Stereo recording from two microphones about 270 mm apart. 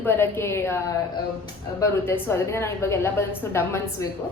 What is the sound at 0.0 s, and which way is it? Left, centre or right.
A woman's voice, centre.